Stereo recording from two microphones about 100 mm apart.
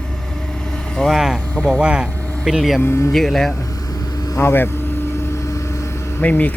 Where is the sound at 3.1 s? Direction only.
5° left (ahead or behind).